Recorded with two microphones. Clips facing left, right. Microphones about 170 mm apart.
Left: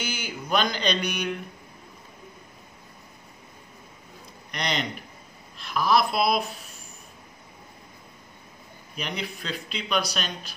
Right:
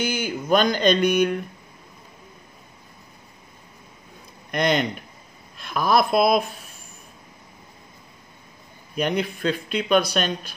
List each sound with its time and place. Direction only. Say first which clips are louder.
0.0 s speech: right 8 dB; 50° right (ahead or behind)
4.5 s a man's voice: right 8 dB; 50° right (ahead or behind)
8.9 s speech: right 9 dB; 50° right (ahead or behind)